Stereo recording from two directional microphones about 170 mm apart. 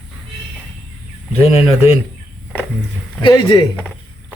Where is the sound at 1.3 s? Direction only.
35° left (ahead or behind).